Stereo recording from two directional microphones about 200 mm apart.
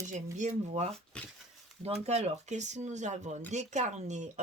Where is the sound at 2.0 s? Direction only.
35° right (ahead or behind).